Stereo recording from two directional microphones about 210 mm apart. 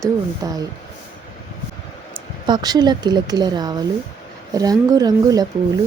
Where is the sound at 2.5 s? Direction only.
20° right (ahead or behind).